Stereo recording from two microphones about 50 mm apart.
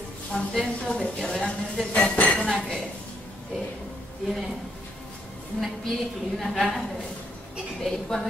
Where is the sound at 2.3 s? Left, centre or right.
Centre.